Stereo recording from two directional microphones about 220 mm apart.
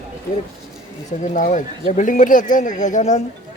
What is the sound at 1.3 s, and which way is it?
Speech, 35° left (ahead or behind).